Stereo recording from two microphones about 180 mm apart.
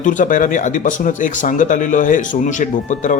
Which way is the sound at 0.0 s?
45° left (ahead or behind).